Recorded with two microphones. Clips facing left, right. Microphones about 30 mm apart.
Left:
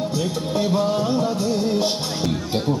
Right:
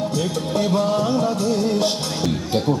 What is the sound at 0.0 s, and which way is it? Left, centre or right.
Music, centre.